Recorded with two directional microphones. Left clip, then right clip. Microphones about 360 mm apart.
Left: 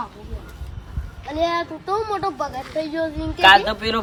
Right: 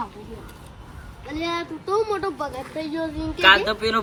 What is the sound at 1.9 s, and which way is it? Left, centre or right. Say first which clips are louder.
Speech: even; centre.